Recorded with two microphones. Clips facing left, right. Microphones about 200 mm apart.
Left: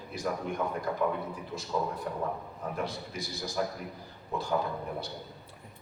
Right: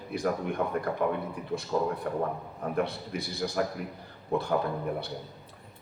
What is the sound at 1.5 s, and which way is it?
Speech, 60° right (ahead or behind).